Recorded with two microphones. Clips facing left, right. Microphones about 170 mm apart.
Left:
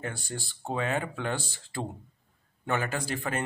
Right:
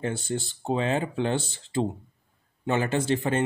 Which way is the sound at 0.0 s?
25° right (ahead or behind).